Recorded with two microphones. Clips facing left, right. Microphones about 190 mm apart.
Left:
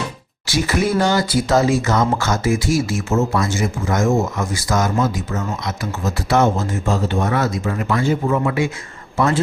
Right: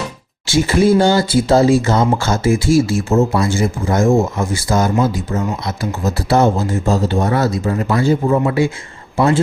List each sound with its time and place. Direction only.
0.4 s speech: 25° right (ahead or behind)